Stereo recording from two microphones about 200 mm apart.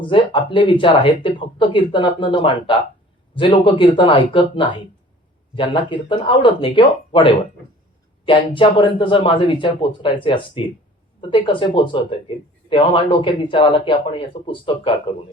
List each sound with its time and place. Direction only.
0.1 s speech: 25° left (ahead or behind)